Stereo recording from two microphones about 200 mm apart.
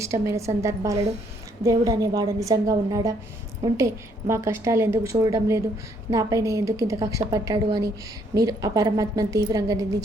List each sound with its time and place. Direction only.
0.0 s a woman's voice: 15° right (ahead or behind)